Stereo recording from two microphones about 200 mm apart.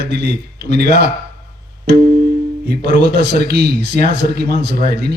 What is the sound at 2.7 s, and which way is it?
A man's voice, 55° right (ahead or behind).